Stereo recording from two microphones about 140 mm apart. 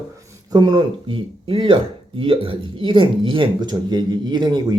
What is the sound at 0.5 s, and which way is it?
Speech, 30° right (ahead or behind).